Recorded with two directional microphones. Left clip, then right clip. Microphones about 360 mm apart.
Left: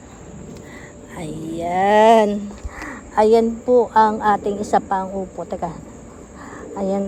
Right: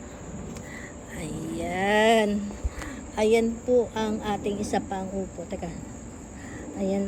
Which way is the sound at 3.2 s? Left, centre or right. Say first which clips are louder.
Left 8 dB; left.